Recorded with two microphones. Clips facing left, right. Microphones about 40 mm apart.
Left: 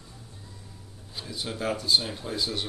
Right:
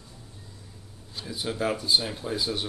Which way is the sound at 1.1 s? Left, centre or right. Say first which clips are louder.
Right 3 dB; centre.